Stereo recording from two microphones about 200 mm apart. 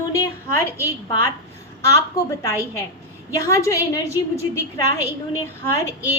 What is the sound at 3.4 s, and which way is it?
Speech, 15° left (ahead or behind).